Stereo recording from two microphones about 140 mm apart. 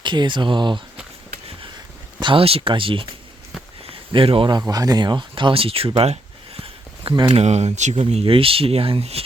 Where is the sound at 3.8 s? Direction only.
40° right (ahead or behind).